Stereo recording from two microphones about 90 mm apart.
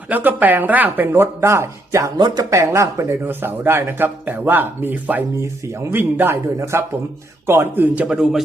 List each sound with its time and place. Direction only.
0.1 s speech: 20° right (ahead or behind)
2.1 s speech: 50° right (ahead or behind)
2.5 s speech: 35° right (ahead or behind)
3.2 s speech: 25° right (ahead or behind)
5.4 s a man's voice: 30° right (ahead or behind); by 8.4 s 5° right (ahead or behind)